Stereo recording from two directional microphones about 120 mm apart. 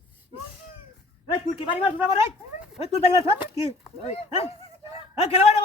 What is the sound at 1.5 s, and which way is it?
Speech, 50° left (ahead or behind).